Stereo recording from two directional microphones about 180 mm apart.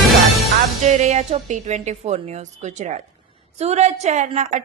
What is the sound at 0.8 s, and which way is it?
A woman's voice, 40° right (ahead or behind).